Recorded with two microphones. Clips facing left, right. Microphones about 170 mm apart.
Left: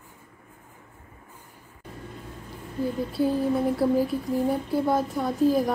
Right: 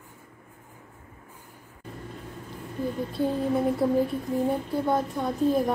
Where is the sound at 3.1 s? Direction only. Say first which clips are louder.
Left 2 dB; 5° left (ahead or behind).